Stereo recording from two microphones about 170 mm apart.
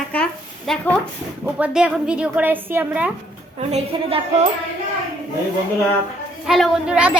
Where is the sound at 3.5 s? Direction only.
35° right (ahead or behind).